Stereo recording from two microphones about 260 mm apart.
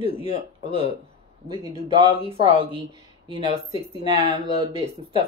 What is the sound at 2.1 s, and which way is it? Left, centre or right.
A woman's voice, right.